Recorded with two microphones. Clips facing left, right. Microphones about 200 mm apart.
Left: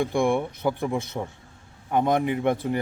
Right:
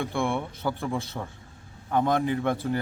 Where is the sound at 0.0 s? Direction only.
15° left (ahead or behind).